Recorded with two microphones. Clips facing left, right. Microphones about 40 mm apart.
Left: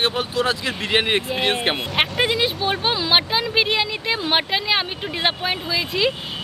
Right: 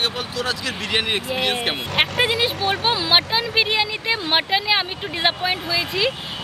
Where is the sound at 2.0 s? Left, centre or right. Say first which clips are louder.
Right 1 dB; centre.